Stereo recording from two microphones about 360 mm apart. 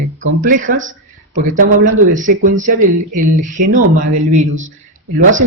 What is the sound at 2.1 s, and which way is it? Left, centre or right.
Speech, right.